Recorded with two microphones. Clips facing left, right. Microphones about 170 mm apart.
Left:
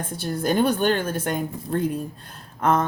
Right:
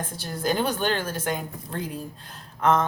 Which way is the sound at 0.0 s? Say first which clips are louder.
Left 3 dB; 55° left (ahead or behind).